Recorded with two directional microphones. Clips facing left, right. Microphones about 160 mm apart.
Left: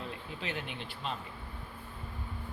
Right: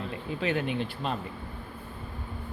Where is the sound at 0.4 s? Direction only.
50° right (ahead or behind).